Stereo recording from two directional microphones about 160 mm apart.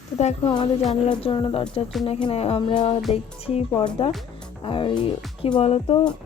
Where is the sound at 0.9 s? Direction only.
35° left (ahead or behind).